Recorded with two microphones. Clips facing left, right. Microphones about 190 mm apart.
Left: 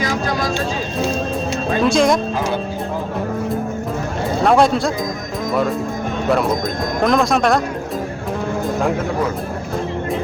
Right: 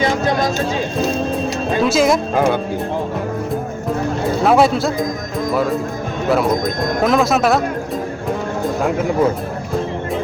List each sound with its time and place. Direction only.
0.0 s a sound: 25° right (ahead or behind)
1.8 s speech: 5° right (ahead or behind)
2.3 s speech: 55° right (ahead or behind)
4.4 s speech: 5° right (ahead or behind)
7.0 s speech: 5° right (ahead or behind)